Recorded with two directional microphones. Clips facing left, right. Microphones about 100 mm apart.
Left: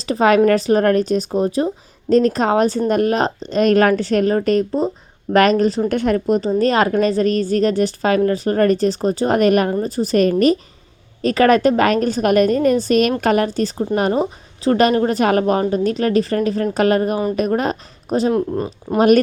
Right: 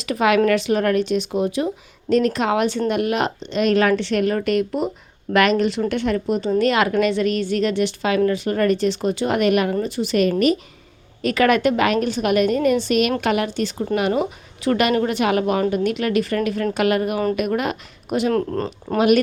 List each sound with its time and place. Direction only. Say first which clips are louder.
0.0 s a woman's voice: left 4 dB; 35° left (ahead or behind)
18.3 s speech: left 2 dB; 15° left (ahead or behind)
18.9 s a woman's voice: left 4 dB; 40° left (ahead or behind)